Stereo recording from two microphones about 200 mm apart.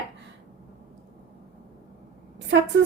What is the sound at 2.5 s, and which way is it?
Speech, 65° right (ahead or behind).